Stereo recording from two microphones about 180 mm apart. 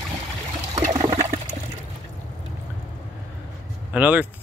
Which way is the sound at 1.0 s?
35° right (ahead or behind).